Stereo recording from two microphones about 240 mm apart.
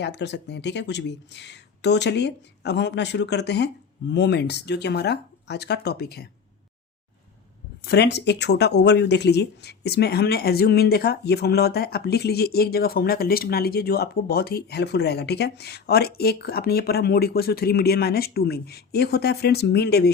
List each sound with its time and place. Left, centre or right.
0.0 s speech: left
7.9 s speech: left